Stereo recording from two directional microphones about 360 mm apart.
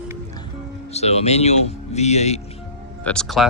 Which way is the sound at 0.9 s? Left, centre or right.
Centre.